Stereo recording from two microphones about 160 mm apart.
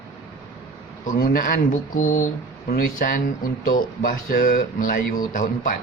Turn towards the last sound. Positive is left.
turn(degrees=60)  # may be behind; listen again after turning